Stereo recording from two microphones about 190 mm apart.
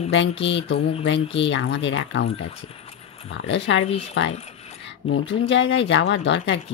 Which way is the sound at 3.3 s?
75° left (ahead or behind).